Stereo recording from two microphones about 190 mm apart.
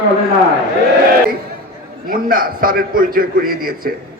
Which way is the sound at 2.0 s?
50° right (ahead or behind).